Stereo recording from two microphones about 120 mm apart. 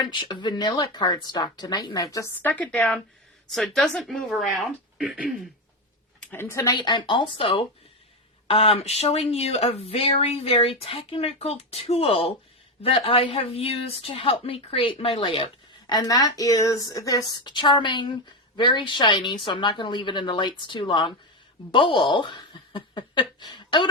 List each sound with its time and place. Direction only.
0.0 s speech: 40° left (ahead or behind)
2.4 s a woman's voice: 15° left (ahead or behind); by 5.5 s 5° right (ahead or behind)
6.3 s speech: 20° left (ahead or behind)
6.7 s speech: 40° left (ahead or behind)
15.9 s a woman's voice: 35° left (ahead or behind)